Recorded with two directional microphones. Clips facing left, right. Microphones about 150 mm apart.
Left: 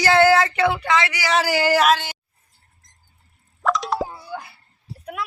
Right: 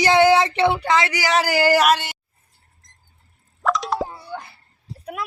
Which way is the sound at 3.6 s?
Centre (ahead or behind).